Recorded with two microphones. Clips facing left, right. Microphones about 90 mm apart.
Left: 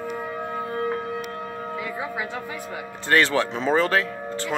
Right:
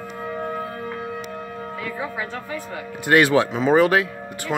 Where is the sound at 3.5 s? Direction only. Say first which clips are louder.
Right 4 dB; 5° right (ahead or behind).